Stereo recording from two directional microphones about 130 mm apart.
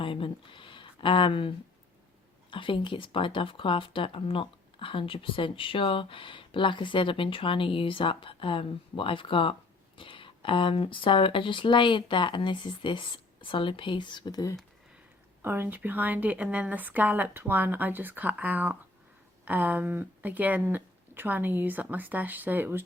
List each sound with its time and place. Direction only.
0.0 s a sound: 40° left (ahead or behind)
2.5 s speech: 40° left (ahead or behind)
15.4 s a woman's voice: 15° right (ahead or behind)